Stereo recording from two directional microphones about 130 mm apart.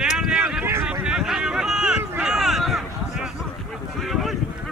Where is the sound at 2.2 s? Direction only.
5° right (ahead or behind).